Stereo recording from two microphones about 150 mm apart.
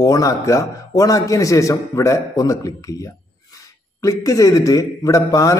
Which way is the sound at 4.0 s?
20° left (ahead or behind).